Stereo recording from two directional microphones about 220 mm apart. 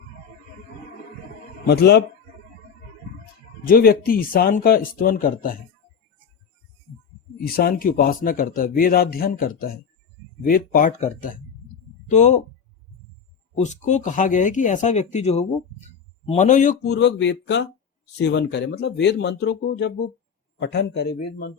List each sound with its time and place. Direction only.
1.6 s speech: 45° left (ahead or behind)
3.7 s a man's voice: 40° left (ahead or behind)
7.4 s a man's voice: 45° left (ahead or behind)
13.7 s a man's voice: 35° left (ahead or behind)
16.8 s speech: 50° left (ahead or behind)